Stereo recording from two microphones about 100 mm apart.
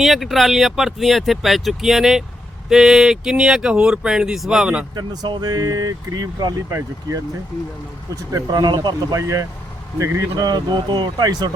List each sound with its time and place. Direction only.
0.0 s speech: centre (ahead or behind)
4.9 s speech: 45° right (ahead or behind)
6.7 s speech: 25° right (ahead or behind); by 9.2 s 45° right (ahead or behind)
9.2 s speech: 35° right (ahead or behind)